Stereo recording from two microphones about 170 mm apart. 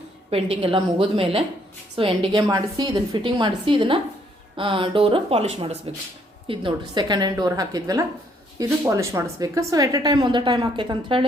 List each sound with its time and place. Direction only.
0.3 s a woman's voice: 35° right (ahead or behind)